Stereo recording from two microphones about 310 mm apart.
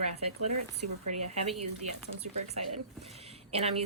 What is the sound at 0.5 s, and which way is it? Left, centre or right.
Speech, right.